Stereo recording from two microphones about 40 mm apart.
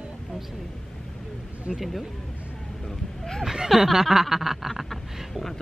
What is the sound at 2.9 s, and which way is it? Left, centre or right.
Speech, centre.